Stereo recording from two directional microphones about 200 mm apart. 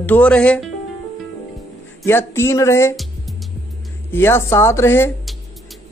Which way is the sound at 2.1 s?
10° left (ahead or behind).